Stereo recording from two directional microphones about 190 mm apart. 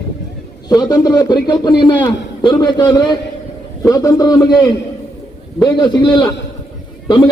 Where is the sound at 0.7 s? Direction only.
20° left (ahead or behind).